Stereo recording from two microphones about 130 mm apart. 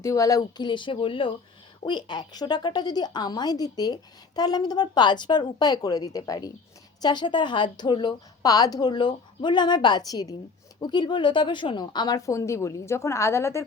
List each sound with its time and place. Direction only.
0.0 s a woman's voice: 25° left (ahead or behind)